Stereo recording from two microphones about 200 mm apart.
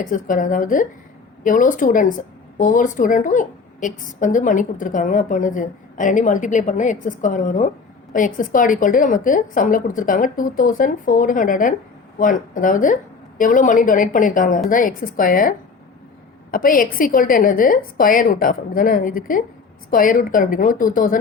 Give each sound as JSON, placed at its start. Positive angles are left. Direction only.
{"t": 0.0, "sound": "a woman's voice", "side_deg": 40}